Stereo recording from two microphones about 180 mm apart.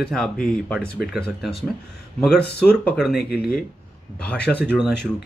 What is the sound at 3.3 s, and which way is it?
Speech, 60° left (ahead or behind).